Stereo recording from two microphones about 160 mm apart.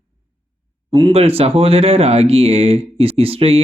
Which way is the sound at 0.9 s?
35° right (ahead or behind).